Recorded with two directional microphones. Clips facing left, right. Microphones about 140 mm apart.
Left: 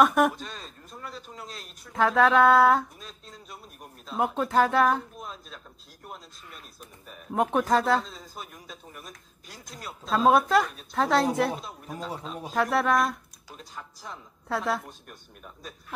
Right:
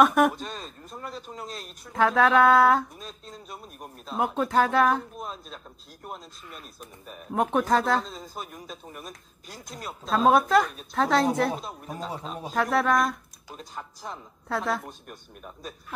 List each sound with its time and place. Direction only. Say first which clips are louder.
0.0 s speech: right 1 dB; centre (ahead or behind)
0.4 s speech: right 4 dB; 40° right (ahead or behind)
1.9 s speech: even; centre (ahead or behind)
4.2 s speech: even; centre (ahead or behind)
5.2 s speech: right 4 dB; 35° right (ahead or behind)
7.3 s speech: even; centre (ahead or behind)
8.4 s speech: right 4 dB; 30° right (ahead or behind)
10.0 s speech: even; centre (ahead or behind)
11.6 s speech: right 2 dB; 45° right (ahead or behind)
12.5 s speech: even; centre (ahead or behind)
13.5 s speech: right 4 dB; 25° right (ahead or behind)
14.5 s speech: even; 5° left (ahead or behind)
15.0 s speech: right 4 dB; 40° right (ahead or behind)